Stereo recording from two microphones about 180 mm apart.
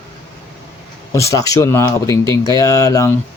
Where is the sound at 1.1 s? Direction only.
15° left (ahead or behind).